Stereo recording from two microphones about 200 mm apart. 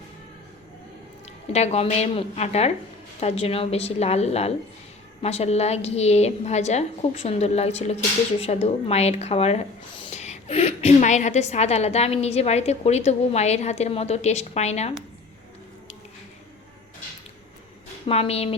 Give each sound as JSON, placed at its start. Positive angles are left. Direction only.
{"t": 1.2, "sound": "speech", "side_deg": 35}
{"t": 18.0, "sound": "speech", "side_deg": 30}